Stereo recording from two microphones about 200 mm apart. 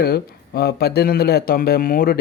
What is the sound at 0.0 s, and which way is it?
Speech, 50° left (ahead or behind).